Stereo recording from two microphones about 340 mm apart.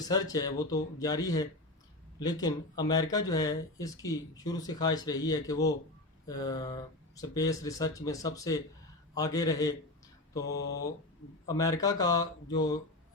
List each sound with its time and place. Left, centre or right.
0.0 s speech: centre
10.4 s mantra: left
11.4 s speech: centre